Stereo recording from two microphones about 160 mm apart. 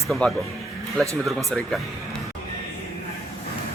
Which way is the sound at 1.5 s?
Centre (ahead or behind).